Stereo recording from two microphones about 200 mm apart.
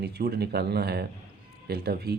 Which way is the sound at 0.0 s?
55° right (ahead or behind).